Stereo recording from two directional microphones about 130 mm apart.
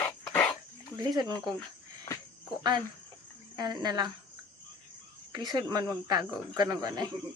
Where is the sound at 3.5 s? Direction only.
30° right (ahead or behind).